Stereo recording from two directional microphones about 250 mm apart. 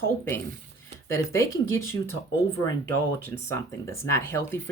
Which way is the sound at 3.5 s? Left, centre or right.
Centre.